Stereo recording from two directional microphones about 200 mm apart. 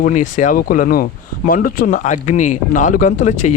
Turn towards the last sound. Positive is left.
turn(degrees=40)  # may be behind; listen again after turning